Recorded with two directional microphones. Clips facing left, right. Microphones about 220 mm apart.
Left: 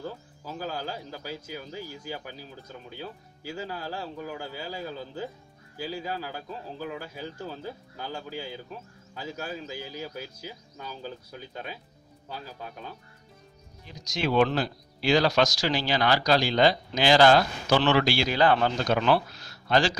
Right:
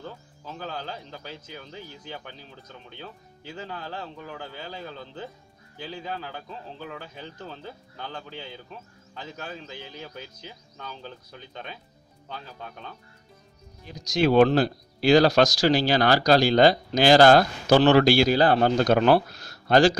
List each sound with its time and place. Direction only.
0.0 s speech: 5° left (ahead or behind)
13.8 s speech: 40° right (ahead or behind)